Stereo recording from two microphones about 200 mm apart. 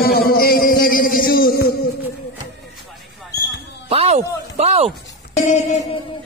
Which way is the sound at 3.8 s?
30° right (ahead or behind).